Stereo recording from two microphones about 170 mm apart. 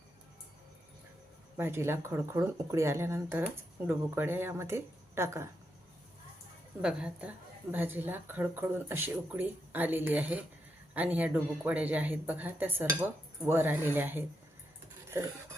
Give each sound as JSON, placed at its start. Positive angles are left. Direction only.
{"t": 1.5, "sound": "speech", "side_deg": -15}
{"t": 6.8, "sound": "speech", "side_deg": -5}